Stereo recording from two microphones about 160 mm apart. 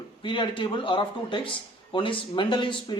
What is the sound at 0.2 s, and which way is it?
A man's voice, 30° left (ahead or behind).